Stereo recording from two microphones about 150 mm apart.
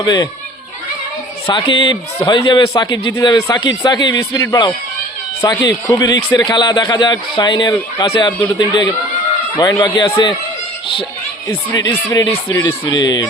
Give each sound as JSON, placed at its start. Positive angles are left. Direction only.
{"t": 0.0, "sound": "a man's voice", "side_deg": 25}
{"t": 1.5, "sound": "a man's voice", "side_deg": 30}
{"t": 11.4, "sound": "a man's voice", "side_deg": 25}
{"t": 12.6, "sound": "a man's voice", "side_deg": 30}